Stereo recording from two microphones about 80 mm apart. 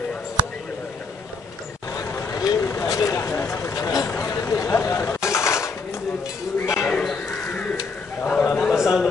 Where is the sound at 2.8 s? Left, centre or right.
Left.